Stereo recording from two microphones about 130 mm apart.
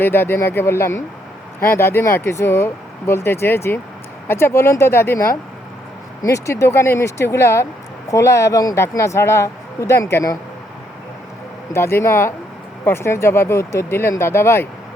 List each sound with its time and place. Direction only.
0.0 s speech: 15° left (ahead or behind)
11.7 s speech: 20° left (ahead or behind)